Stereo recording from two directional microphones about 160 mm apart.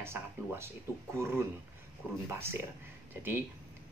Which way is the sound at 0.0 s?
15° right (ahead or behind).